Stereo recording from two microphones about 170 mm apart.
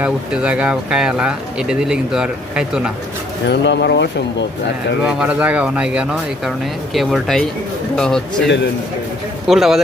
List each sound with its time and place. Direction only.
0.0 s speech: 5° right (ahead or behind)
3.5 s speech: 85° left
5.0 s speech: 5° right (ahead or behind)
9.5 s speech: centre (ahead or behind)